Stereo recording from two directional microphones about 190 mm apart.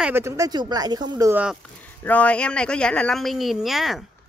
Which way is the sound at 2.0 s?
10° left (ahead or behind).